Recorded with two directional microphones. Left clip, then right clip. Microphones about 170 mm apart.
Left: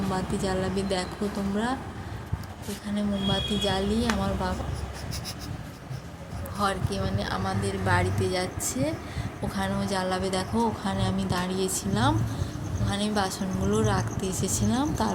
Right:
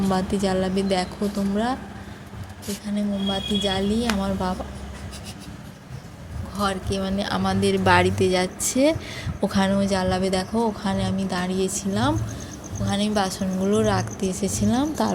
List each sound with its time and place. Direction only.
0.1 s speech: 40° right (ahead or behind)
2.9 s speech: 25° right (ahead or behind)
6.6 s speech: 35° right (ahead or behind); by 9.0 s 55° right (ahead or behind)
9.4 s speech: 45° right (ahead or behind); by 12.1 s 25° right (ahead or behind)
12.9 s speech: 40° right (ahead or behind)
14.3 s speech: 25° right (ahead or behind)